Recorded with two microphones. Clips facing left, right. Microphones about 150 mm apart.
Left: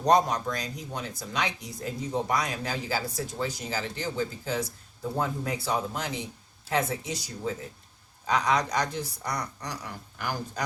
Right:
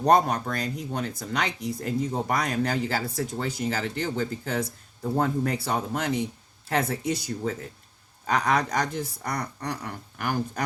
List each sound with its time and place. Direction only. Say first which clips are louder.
0.0 s speech: right 2 dB; 55° right (ahead or behind)